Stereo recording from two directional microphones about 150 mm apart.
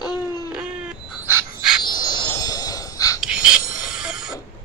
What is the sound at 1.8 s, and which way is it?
Music, 30° left (ahead or behind).